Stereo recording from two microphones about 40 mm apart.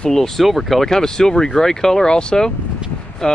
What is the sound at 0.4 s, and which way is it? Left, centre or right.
Speech, centre.